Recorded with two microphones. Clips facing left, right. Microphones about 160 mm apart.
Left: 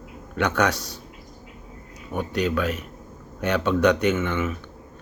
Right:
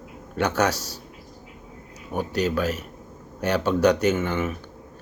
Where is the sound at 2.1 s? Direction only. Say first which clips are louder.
Even; 35° right (ahead or behind).